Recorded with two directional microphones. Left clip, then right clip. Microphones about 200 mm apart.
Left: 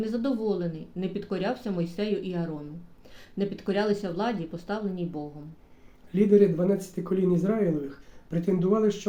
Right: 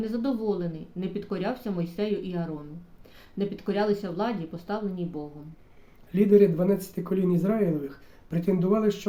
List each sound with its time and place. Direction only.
0.0 s speech: 10° left (ahead or behind)
6.1 s speech: 20° right (ahead or behind)